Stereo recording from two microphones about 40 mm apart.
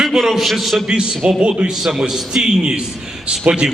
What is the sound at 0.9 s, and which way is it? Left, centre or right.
Speech, right.